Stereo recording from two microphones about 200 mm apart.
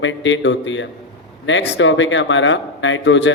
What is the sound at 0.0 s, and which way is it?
A man's voice, 70° left (ahead or behind).